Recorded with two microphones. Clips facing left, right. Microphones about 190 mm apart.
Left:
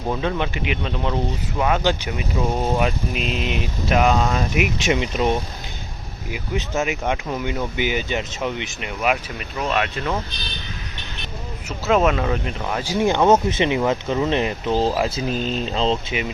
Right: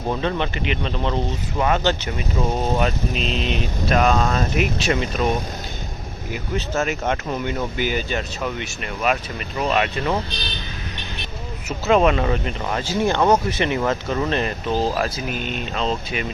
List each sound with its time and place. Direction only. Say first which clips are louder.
0.1 s speech: even; 10° left (ahead or behind)
9.6 s speech: right 2 dB; centre (ahead or behind)
11.9 s speech: right 1 dB; centre (ahead or behind)
12.8 s speech: left 2 dB; 15° left (ahead or behind)
15.3 s speech: left 4 dB; 30° left (ahead or behind)